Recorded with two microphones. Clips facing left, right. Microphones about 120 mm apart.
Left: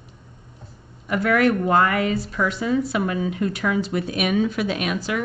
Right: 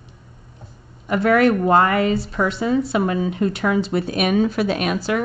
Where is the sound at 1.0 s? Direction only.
30° right (ahead or behind).